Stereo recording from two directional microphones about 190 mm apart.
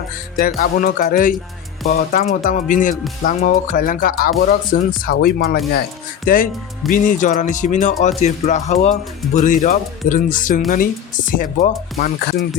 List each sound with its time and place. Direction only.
0.3 s speech: 45° left (ahead or behind)